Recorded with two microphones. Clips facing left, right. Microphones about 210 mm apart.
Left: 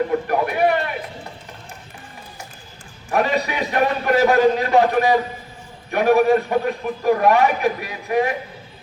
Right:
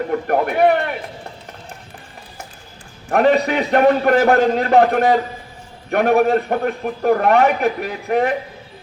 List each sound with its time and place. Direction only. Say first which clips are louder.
0.3 s a man's voice: right 3 dB; 55° right (ahead or behind)
3.1 s a man's voice: right 6 dB; 55° right (ahead or behind)